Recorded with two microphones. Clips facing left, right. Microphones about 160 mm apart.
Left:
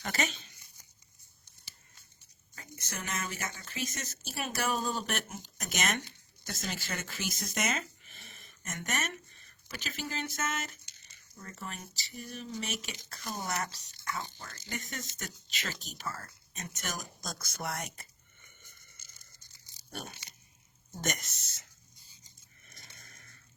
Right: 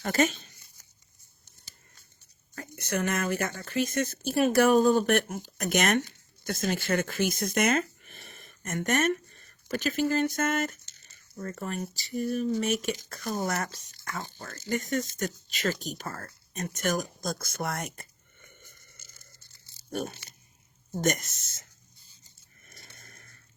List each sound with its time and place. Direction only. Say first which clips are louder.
0.0 s speech: right 9 dB; 45° right (ahead or behind)
2.6 s speech: right 13 dB; 60° right (ahead or behind)
19.4 s a sound: right 2 dB; 15° left (ahead or behind)
19.9 s speech: right 10 dB; 45° right (ahead or behind)
22.6 s vehicle: right 4 dB; 45° right (ahead or behind)